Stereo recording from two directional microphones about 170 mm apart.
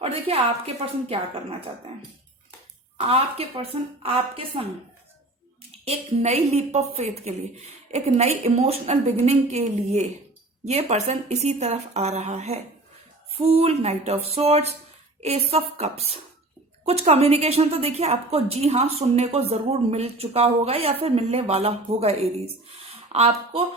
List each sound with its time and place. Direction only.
0.0 s a woman's voice: 35° right (ahead or behind)
3.0 s a woman's voice: 35° right (ahead or behind)
5.8 s a woman's voice: 35° right (ahead or behind)